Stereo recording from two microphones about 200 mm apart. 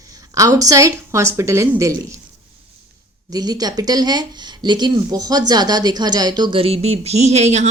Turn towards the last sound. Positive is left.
turn(degrees=-35)  # may be behind; listen again after turning